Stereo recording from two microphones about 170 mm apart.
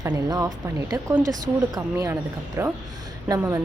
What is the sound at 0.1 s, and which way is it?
A woman's voice, 20° right (ahead or behind).